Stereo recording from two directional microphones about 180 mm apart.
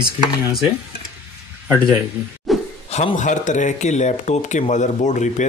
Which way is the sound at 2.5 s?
Centre (ahead or behind).